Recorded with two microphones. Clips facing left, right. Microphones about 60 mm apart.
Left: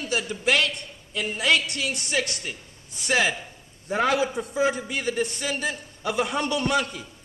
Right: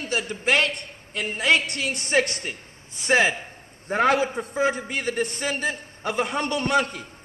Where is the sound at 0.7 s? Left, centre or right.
Right.